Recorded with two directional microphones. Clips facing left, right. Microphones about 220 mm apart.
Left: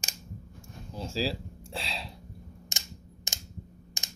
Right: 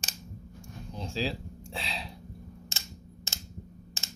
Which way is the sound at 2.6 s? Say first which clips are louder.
Even; 15° left (ahead or behind).